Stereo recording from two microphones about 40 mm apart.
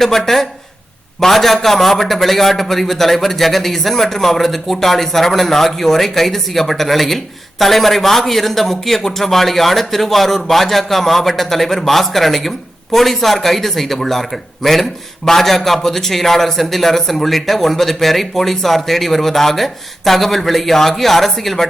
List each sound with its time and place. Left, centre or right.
0.0 s a man's voice: centre